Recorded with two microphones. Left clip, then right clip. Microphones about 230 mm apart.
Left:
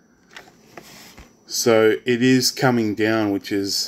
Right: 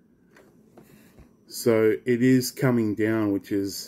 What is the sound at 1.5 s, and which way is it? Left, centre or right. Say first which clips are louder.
Speech: left 5 dB; left.